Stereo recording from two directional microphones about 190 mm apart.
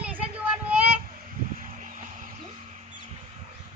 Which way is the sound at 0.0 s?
5° right (ahead or behind).